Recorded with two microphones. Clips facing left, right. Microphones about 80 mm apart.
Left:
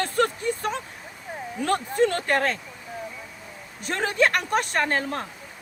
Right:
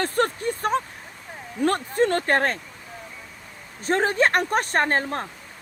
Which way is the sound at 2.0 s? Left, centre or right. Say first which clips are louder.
Right 2 dB; right.